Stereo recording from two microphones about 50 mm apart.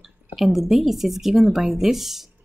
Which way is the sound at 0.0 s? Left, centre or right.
Centre.